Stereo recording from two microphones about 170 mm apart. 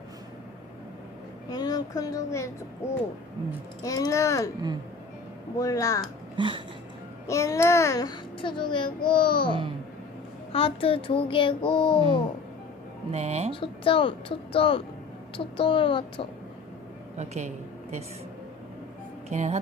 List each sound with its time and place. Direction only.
1.5 s speech: 25° left (ahead or behind)
3.8 s a child's voice: 20° left (ahead or behind)
5.5 s a child's voice: 20° left (ahead or behind)
6.3 s speech: 30° right (ahead or behind)
7.3 s a child's voice: 15° left (ahead or behind)
13.1 s speech: 40° right (ahead or behind)
13.5 s a child's voice: 30° left (ahead or behind)
17.2 s a woman's voice: 40° right (ahead or behind)
19.3 s speech: 40° right (ahead or behind)